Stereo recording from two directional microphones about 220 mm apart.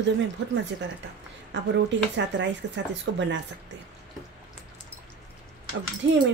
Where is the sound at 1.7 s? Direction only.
55° right (ahead or behind).